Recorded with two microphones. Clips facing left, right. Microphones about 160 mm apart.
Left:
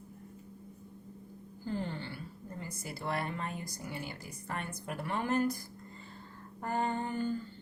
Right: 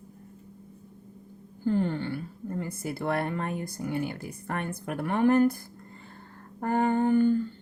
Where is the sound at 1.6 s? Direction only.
55° right (ahead or behind).